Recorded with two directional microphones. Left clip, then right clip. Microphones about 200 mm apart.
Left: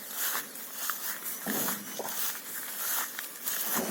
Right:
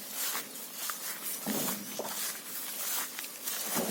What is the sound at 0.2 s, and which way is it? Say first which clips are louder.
Walk: left 2 dB; 15° left (ahead or behind).